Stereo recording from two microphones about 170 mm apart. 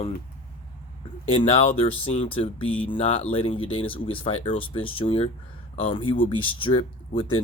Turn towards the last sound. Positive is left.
turn(degrees=30)  # may be behind; listen again after turning